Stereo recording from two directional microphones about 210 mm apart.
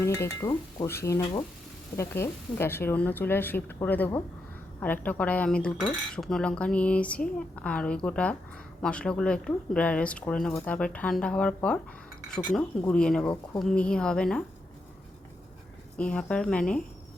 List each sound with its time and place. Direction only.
0.0 s speech: 15° left (ahead or behind)
2.0 s speech: 10° left (ahead or behind)
12.8 s speech: 5° left (ahead or behind)
16.0 s speech: 5° left (ahead or behind)